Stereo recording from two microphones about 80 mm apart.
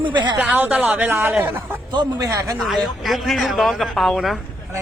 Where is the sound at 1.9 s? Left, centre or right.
Right.